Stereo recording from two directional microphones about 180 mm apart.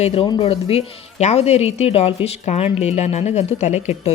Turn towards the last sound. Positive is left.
turn(degrees=40)  # may be behind; listen again after turning